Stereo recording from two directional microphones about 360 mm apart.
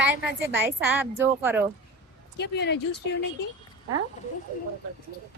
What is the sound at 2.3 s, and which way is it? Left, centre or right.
Speech, left.